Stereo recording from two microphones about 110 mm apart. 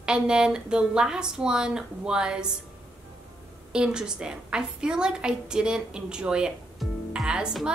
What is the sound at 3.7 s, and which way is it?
A woman's voice, 10° right (ahead or behind).